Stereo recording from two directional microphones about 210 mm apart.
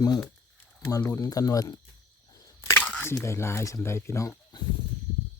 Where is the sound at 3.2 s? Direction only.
10° left (ahead or behind).